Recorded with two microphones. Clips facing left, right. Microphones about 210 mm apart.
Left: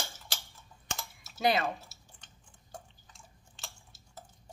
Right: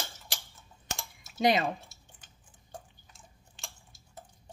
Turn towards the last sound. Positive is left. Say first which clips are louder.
# even
turn(degrees=0)  # may be behind; listen again after turning